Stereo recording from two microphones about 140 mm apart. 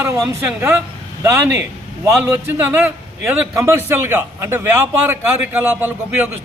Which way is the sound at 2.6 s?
15° right (ahead or behind).